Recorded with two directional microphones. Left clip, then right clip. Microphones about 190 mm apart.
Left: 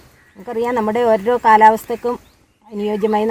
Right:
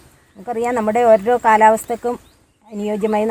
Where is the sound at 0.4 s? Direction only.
15° right (ahead or behind).